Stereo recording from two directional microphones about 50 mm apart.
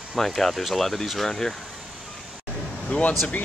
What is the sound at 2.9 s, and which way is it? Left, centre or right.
Speech, left.